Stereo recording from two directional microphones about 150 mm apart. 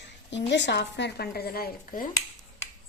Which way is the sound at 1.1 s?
90° left.